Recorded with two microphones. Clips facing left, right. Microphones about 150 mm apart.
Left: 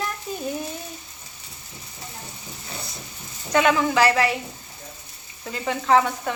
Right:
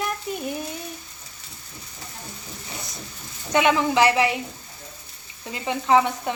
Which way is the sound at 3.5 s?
20° right (ahead or behind).